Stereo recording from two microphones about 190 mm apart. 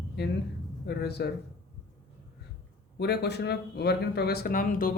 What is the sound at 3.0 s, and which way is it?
Speech, 60° left (ahead or behind).